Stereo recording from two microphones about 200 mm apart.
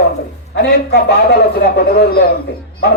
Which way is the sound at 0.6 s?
55° left (ahead or behind).